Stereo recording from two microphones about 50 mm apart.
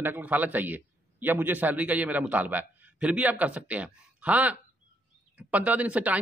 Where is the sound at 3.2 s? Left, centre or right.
Right.